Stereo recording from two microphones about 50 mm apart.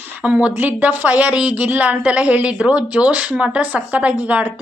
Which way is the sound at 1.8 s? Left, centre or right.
Right.